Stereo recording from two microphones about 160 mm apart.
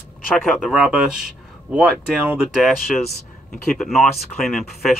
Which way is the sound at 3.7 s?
Centre (ahead or behind).